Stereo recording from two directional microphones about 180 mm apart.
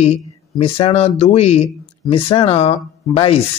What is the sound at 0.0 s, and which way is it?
Speech, 35° left (ahead or behind).